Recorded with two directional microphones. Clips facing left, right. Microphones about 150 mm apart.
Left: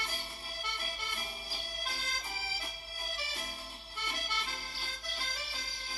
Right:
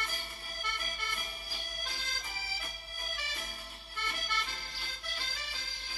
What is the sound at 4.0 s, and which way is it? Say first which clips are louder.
Accordion: right 1 dB; 10° left (ahead or behind).